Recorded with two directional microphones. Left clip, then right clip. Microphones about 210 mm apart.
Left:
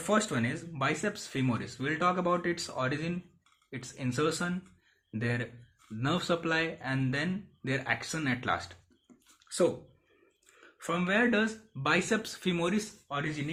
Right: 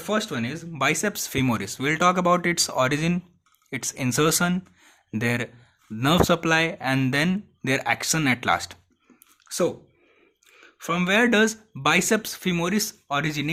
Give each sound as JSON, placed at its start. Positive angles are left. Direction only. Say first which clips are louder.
{"t": 0.0, "sound": "speech", "louder": "right 3 dB", "side_deg": -20}
{"t": 13.1, "sound": "speech", "louder": "right 9 dB", "side_deg": -45}